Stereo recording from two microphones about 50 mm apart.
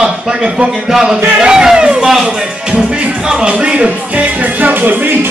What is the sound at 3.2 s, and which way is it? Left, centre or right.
Speech, right.